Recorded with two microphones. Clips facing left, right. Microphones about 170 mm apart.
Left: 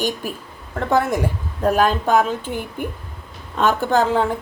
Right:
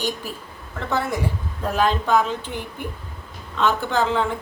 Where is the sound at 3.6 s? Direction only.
45° left (ahead or behind).